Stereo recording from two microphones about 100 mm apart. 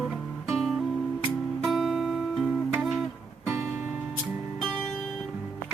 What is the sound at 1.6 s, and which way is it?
Guitar, centre (ahead or behind).